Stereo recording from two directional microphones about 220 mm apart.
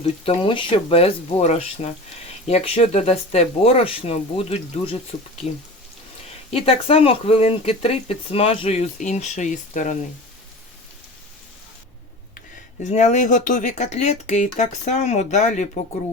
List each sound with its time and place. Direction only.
0.0 s speech: 25° left (ahead or behind)
6.7 s speech: 25° left (ahead or behind)
12.8 s speech: 30° left (ahead or behind)